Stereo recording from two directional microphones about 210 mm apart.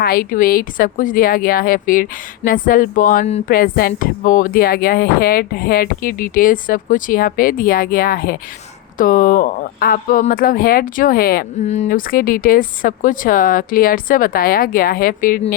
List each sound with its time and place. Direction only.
0.0 s a woman's voice: 45° left (ahead or behind)